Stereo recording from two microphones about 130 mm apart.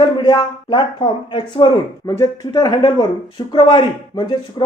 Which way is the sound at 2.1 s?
25° left (ahead or behind).